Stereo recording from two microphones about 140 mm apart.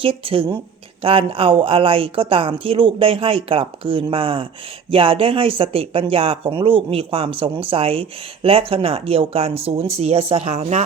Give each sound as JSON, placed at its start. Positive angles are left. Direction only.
{"t": 0.0, "sound": "speech", "side_deg": -40}